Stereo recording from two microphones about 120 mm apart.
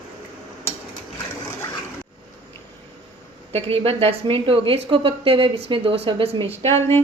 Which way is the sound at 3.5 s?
55° right (ahead or behind).